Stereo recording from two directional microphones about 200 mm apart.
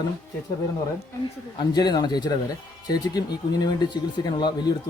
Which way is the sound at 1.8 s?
20° left (ahead or behind).